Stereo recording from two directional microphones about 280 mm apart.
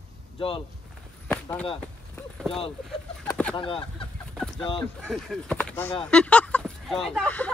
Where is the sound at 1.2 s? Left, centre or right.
Centre.